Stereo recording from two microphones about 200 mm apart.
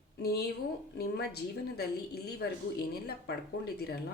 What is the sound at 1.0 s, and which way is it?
A woman's voice, 50° left (ahead or behind).